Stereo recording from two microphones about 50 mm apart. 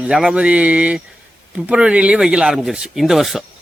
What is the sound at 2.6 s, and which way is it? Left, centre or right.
Speech, centre.